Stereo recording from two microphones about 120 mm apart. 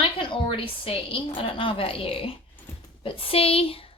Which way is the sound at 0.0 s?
45° left (ahead or behind).